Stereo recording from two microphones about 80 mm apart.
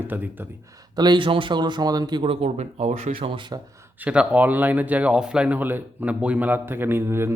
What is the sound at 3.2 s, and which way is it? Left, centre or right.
Speech, right.